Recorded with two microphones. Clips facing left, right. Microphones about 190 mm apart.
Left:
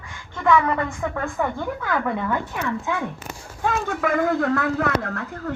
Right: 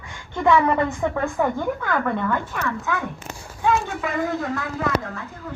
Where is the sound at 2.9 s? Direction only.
25° left (ahead or behind).